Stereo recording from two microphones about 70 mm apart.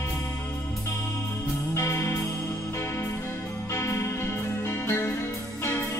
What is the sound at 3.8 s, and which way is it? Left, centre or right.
Music, left.